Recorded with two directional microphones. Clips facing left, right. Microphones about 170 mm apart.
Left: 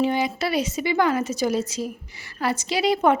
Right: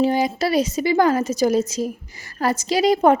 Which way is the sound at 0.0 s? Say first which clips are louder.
Right 4 dB; 40° right (ahead or behind).